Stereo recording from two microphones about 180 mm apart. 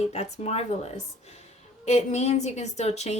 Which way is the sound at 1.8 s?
40° left (ahead or behind).